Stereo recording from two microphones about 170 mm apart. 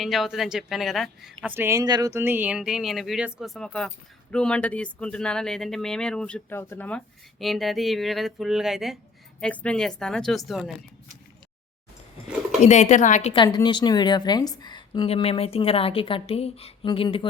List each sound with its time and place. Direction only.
0.0 s speech: centre (ahead or behind)
12.6 s speech: 45° left (ahead or behind)
13.3 s a woman's voice: 25° left (ahead or behind)